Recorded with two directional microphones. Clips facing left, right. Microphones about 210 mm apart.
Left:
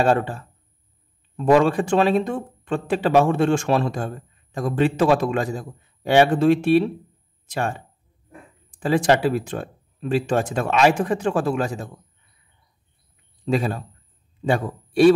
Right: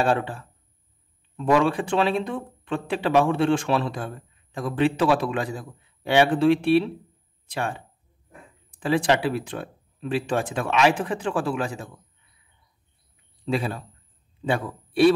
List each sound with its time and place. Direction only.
0.0 s speech: 40° left (ahead or behind)
13.5 s speech: 45° left (ahead or behind)